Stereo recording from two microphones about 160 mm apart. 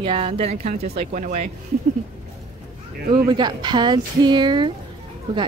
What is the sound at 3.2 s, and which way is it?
Speech, 25° right (ahead or behind).